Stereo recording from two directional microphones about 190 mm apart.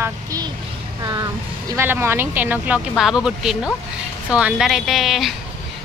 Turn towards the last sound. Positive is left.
turn(degrees=0)  # may be behind; listen again after turning